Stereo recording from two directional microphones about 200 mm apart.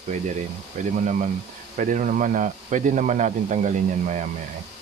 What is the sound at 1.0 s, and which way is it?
Speech, 35° right (ahead or behind).